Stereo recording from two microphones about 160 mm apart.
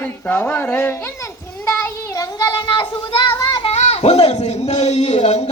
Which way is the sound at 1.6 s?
15° left (ahead or behind).